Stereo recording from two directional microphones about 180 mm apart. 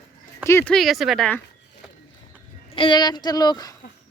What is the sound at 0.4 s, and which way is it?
Speech, 10° left (ahead or behind).